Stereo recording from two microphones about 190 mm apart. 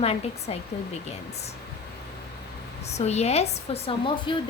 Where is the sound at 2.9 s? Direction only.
35° left (ahead or behind).